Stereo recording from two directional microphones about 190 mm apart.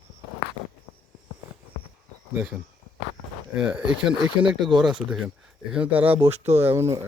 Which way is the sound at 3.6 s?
5° right (ahead or behind).